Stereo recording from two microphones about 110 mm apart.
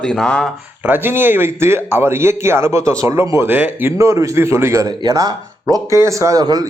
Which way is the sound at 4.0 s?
30° right (ahead or behind).